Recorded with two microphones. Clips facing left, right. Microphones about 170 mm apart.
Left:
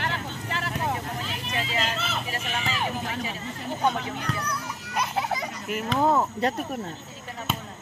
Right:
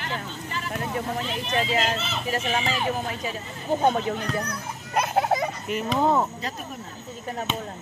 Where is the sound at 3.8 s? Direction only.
45° right (ahead or behind).